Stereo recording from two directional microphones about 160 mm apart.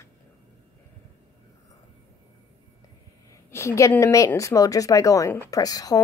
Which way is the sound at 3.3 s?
15° left (ahead or behind).